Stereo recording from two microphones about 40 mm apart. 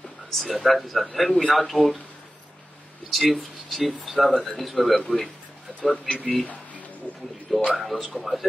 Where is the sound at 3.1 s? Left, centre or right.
Centre.